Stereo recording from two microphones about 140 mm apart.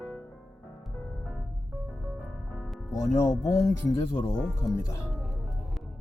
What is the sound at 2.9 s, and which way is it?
Speech, 25° left (ahead or behind).